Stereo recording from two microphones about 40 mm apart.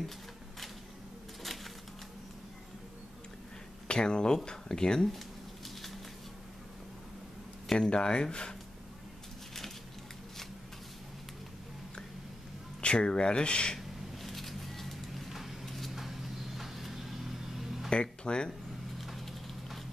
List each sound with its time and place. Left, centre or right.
1.4 s a sound: centre
3.8 s speech: left
7.7 s speech: left
12.8 s speech: left
13.7 s a sound: centre
15.6 s vehicle: centre
17.8 s speech: left
18.9 s horse: centre